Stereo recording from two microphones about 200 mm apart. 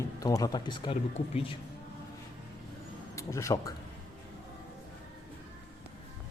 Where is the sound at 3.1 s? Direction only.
15° left (ahead or behind).